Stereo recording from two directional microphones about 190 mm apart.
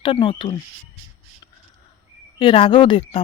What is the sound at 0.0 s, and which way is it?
Speech, 25° left (ahead or behind).